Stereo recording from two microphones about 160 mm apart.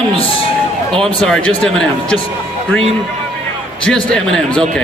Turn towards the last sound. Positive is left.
turn(degrees=5)  # may be behind; listen again after turning